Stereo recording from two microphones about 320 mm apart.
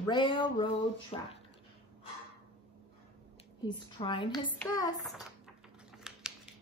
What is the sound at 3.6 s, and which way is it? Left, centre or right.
A woman's voice, centre.